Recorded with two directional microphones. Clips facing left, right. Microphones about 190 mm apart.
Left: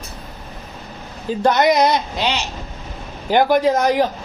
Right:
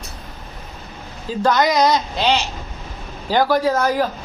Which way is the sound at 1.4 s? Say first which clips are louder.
Left 1 dB; 20° left (ahead or behind).